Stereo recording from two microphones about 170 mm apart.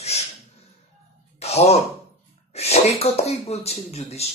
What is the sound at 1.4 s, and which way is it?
Speech, 35° left (ahead or behind).